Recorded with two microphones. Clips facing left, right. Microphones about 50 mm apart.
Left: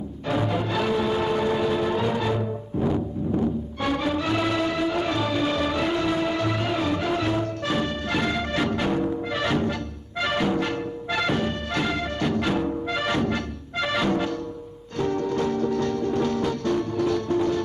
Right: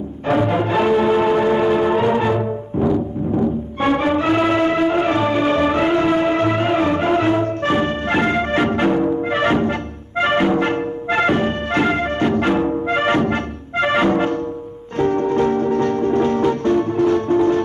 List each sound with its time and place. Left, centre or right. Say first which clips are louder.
0.3 s music: right 8 dB; right